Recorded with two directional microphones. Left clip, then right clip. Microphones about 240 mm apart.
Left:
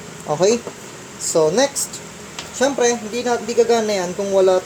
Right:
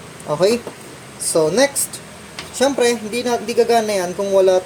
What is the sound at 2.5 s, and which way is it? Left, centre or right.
A woman's voice, centre.